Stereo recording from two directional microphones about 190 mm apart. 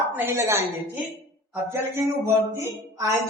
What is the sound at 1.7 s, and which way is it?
A woman's voice, 15° right (ahead or behind).